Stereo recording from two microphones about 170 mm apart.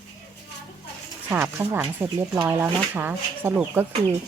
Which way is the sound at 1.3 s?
15° right (ahead or behind).